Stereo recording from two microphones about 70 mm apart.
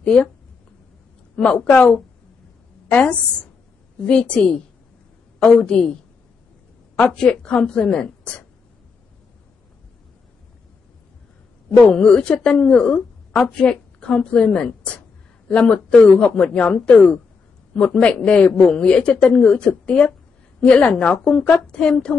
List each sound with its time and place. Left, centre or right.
0.0 s speech: centre
1.3 s a woman's voice: centre
5.4 s a woman's voice: centre
7.1 s a woman's voice: centre
11.8 s a woman's voice: centre